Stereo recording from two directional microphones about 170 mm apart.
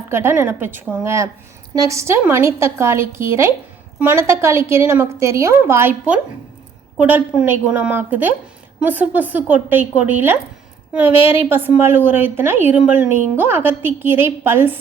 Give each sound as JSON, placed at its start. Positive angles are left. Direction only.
{"t": 0.1, "sound": "a woman's voice", "side_deg": -15}